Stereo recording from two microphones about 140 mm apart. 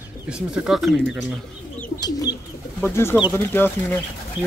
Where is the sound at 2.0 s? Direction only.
25° left (ahead or behind).